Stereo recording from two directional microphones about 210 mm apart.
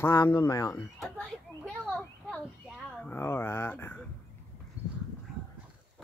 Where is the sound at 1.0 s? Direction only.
Centre (ahead or behind).